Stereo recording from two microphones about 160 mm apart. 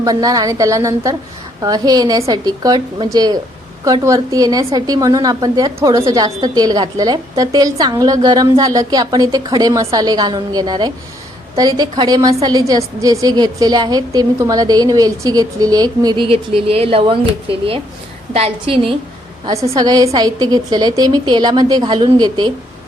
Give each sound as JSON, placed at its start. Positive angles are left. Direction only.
{"t": 0.0, "sound": "a woman's voice", "side_deg": -25}
{"t": 19.7, "sound": "a woman's voice", "side_deg": -25}